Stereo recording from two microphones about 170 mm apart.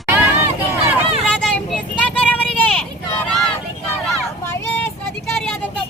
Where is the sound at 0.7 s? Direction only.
15° right (ahead or behind).